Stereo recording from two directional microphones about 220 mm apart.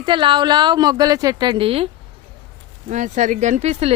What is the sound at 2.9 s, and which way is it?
Speech, 35° right (ahead or behind).